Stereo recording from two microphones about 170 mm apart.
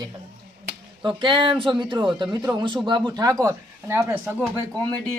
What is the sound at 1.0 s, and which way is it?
Speech, 30° right (ahead or behind).